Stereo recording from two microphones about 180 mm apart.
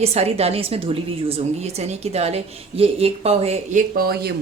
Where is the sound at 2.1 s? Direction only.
35° right (ahead or behind).